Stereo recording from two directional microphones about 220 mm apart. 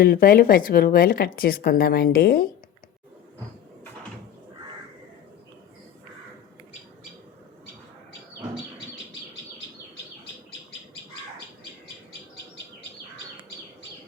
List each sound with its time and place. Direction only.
0.0 s speech: 40° left (ahead or behind)